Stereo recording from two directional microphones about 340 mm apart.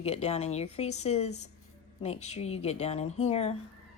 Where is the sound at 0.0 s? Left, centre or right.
Centre.